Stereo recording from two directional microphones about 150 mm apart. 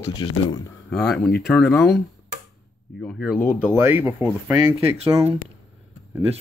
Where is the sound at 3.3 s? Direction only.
15° left (ahead or behind).